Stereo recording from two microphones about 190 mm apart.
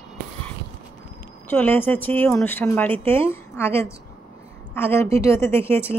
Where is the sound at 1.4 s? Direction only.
10° left (ahead or behind).